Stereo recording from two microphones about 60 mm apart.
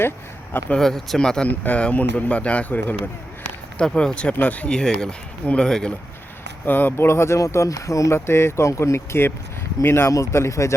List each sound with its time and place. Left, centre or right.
0.8 s speech: centre
1.5 s speech: left
3.9 s speech: centre
4.7 s speech: centre
6.7 s speech: left
8.1 s speech: left
10.1 s speech: left